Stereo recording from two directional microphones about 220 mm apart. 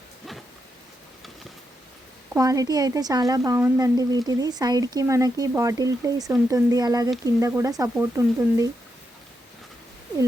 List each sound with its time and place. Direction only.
2.3 s a woman's voice: 15° right (ahead or behind)